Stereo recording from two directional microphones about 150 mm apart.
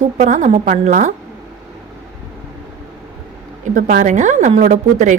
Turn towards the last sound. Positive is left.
turn(degrees=-55)  # may be behind; listen again after turning